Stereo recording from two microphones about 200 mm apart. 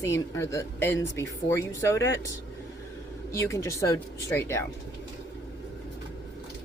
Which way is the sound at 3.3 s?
15° left (ahead or behind).